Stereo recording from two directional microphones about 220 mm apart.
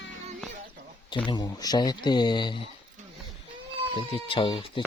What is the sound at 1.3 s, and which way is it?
Speech, 20° left (ahead or behind).